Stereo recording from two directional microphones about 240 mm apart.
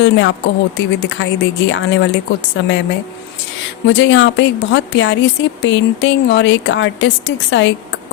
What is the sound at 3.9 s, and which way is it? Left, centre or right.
Speech, left.